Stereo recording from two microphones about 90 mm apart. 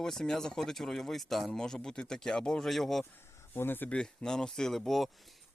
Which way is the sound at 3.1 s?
30° left (ahead or behind).